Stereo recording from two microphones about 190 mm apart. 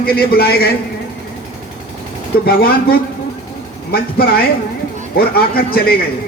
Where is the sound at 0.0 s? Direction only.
55° left (ahead or behind).